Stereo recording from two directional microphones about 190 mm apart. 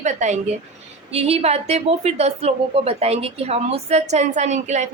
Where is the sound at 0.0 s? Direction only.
40° right (ahead or behind).